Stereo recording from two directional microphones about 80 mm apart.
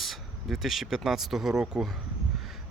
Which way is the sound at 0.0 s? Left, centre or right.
Centre.